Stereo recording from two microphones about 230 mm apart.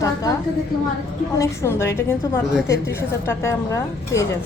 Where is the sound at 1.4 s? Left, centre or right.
Centre.